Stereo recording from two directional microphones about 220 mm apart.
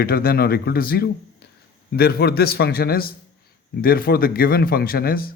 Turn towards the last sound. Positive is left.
turn(degrees=45)  # may be behind; listen again after turning